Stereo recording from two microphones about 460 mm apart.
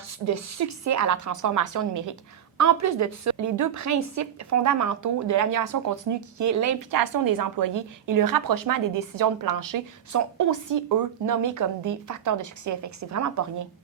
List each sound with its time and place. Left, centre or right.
0.3 s a woman's voice: right